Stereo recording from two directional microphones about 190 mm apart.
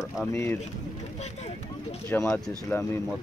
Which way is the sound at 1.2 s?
35° left (ahead or behind).